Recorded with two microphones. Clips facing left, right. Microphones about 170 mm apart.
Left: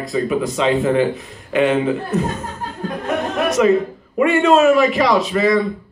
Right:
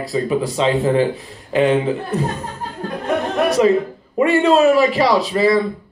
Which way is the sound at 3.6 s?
30° right (ahead or behind).